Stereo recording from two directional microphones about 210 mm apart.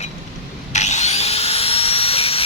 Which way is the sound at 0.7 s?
35° left (ahead or behind).